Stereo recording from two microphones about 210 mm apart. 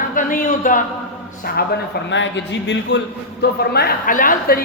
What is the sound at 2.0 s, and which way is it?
A woman's voice, 60° left (ahead or behind).